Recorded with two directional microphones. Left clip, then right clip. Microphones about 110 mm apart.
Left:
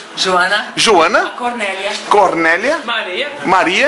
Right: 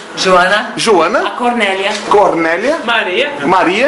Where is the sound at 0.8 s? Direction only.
20° left (ahead or behind).